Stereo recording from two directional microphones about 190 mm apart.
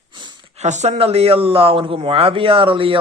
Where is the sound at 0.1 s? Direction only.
25° right (ahead or behind).